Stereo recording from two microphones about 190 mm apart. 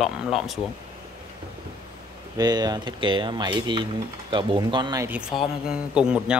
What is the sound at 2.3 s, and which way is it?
Speech, 20° right (ahead or behind).